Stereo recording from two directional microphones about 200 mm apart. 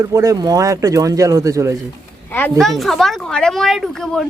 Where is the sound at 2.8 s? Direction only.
Centre (ahead or behind).